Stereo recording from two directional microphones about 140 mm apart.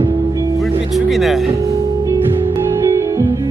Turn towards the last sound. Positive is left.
turn(degrees=-25)  # may be behind; listen again after turning